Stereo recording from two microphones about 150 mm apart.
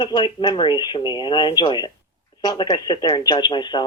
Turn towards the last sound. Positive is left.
turn(degrees=30)  # may be behind; listen again after turning